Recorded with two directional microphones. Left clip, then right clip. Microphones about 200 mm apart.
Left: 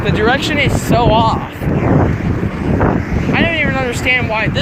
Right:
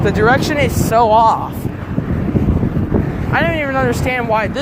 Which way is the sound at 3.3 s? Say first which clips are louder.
Even; 25° right (ahead or behind).